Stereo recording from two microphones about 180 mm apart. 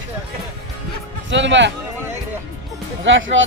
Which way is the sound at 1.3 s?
90° right.